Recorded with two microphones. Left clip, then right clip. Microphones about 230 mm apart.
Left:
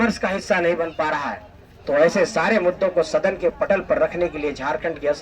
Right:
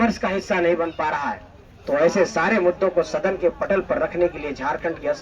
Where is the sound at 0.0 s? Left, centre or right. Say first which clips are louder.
Even; left.